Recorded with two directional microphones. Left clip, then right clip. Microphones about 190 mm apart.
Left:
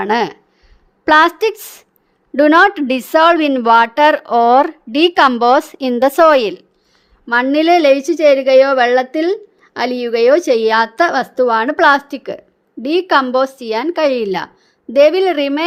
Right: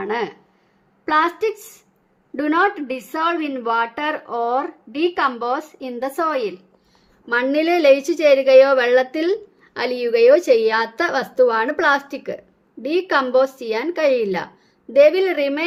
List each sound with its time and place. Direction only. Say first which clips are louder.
0.0 s a woman's voice: left 8 dB; 55° left (ahead or behind)
7.3 s a woman's voice: left 6 dB; 40° left (ahead or behind)